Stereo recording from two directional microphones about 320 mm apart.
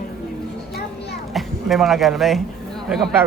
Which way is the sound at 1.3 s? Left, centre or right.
Centre.